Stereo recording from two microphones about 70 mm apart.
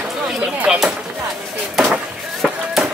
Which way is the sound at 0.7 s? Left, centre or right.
Centre.